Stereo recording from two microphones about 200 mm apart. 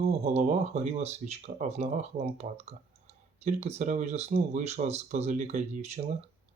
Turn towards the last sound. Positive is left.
turn(degrees=-35)  # may be behind; listen again after turning